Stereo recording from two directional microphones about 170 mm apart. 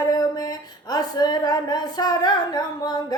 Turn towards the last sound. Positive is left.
turn(degrees=25)  # may be behind; listen again after turning